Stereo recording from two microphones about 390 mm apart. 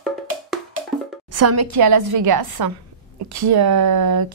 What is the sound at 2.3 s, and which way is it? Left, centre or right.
A woman's voice, right.